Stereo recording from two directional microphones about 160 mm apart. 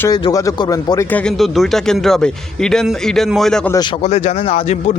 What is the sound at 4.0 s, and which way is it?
Speech, 45° left (ahead or behind).